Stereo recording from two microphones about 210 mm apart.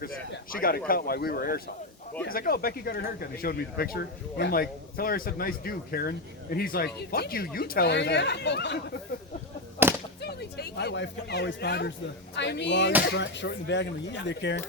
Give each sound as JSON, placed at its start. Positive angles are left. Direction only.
{"t": 0.5, "sound": "speech", "side_deg": 45}
{"t": 9.8, "sound": "whip", "side_deg": -10}
{"t": 10.2, "sound": "speech", "side_deg": 50}